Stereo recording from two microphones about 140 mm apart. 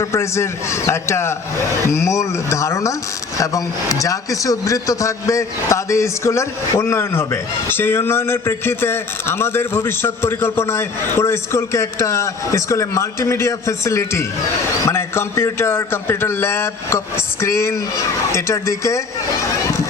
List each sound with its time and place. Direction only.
0.0 s a man's voice: 20° left (ahead or behind)